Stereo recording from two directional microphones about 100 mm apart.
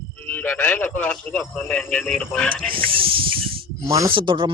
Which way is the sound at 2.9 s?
60° right (ahead or behind).